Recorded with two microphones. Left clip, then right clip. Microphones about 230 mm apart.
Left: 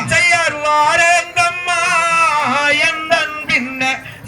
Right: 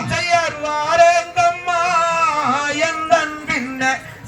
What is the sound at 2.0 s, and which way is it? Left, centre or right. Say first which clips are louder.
Music: left 3 dB; left.